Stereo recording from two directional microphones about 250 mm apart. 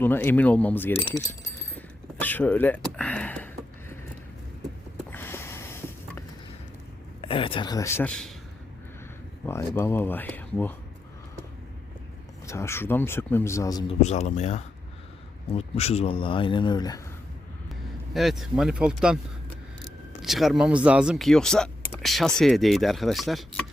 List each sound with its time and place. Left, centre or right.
0.0 s speech: centre
2.2 s a sound: centre
5.1 s a sound: centre
7.2 s speech: left; by 8.3 s centre
9.5 s speech: centre
12.5 s speech: centre
14.0 s speech: left
18.1 s speech: centre